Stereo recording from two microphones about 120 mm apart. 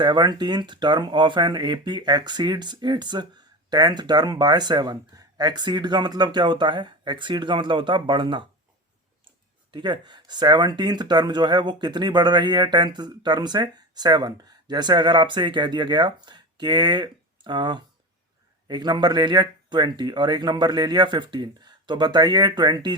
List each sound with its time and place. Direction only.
0.0 s speech: 40° right (ahead or behind)
9.7 s speech: 40° right (ahead or behind)